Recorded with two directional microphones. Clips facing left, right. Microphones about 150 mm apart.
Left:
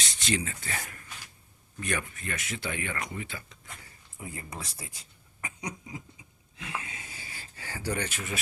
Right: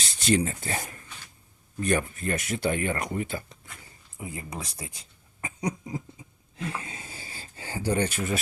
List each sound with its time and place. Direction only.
0.0 s speech: 40° right (ahead or behind)
4.2 s speech: 20° right (ahead or behind)
6.6 s a sound: 35° right (ahead or behind)